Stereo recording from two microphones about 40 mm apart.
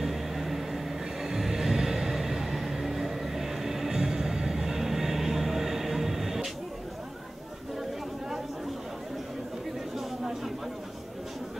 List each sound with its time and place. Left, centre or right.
0.0 s vehicle: centre
1.2 s music: centre
9.9 s a sound: centre